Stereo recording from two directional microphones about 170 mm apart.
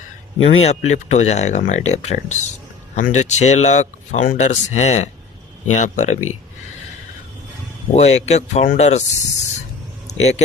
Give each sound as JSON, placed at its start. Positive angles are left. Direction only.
{"t": 0.4, "sound": "speech", "side_deg": 35}
{"t": 7.9, "sound": "speech", "side_deg": 40}